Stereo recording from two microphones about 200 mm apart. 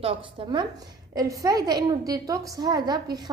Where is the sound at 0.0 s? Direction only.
25° right (ahead or behind).